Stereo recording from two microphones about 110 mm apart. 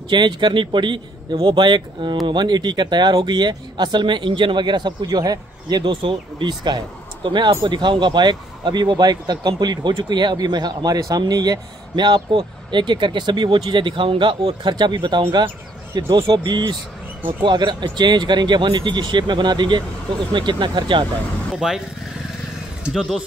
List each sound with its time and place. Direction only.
0.1 s speech: 45° right (ahead or behind)
21.5 s speech: 5° right (ahead or behind)
22.8 s speech: 5° right (ahead or behind)